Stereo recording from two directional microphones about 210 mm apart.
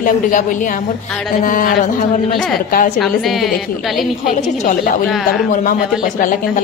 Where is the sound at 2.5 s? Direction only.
40° left (ahead or behind).